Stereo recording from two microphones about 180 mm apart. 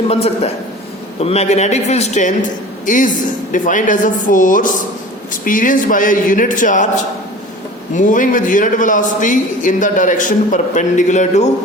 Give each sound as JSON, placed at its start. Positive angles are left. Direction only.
{"t": 0.1, "sound": "a man's voice", "side_deg": 35}